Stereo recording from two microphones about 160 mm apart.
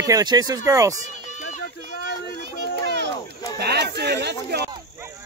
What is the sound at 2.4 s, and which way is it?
Children playing, 90° right.